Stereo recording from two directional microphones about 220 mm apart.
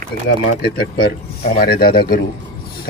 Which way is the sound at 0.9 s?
45° left (ahead or behind).